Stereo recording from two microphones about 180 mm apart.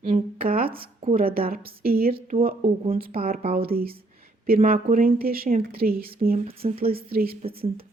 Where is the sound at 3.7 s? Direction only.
55° right (ahead or behind).